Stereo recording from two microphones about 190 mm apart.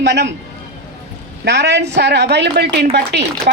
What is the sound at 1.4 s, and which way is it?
A woman's voice, 65° right (ahead or behind).